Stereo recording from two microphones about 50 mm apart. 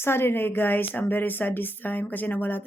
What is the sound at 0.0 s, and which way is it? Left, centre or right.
A woman's voice, left.